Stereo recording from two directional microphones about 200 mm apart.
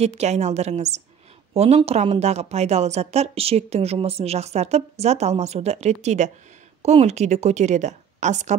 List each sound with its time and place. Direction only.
0.0 s a woman's voice: 35° right (ahead or behind)